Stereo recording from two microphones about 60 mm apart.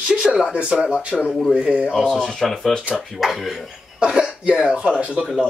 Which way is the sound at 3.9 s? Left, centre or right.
Centre.